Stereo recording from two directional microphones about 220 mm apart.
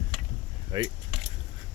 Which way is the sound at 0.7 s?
20° right (ahead or behind).